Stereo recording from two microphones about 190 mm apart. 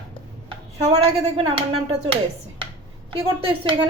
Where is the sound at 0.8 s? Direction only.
30° right (ahead or behind).